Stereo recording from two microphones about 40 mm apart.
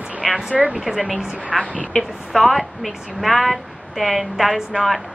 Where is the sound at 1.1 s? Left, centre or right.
Right.